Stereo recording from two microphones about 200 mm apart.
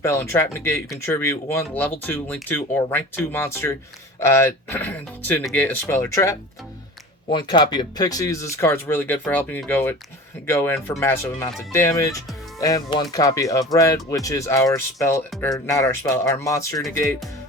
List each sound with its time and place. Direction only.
0.0 s speech: 10° left (ahead or behind)
7.3 s speech: 20° left (ahead or behind)